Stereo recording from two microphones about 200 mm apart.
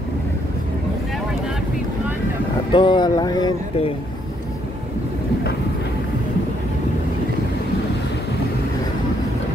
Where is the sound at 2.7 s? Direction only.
25° left (ahead or behind).